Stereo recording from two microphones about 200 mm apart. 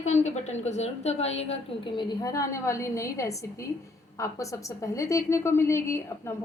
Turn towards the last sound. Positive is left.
turn(degrees=15)  # may be behind; listen again after turning